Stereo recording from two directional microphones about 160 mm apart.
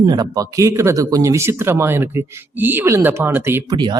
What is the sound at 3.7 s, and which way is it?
Speech, 30° right (ahead or behind).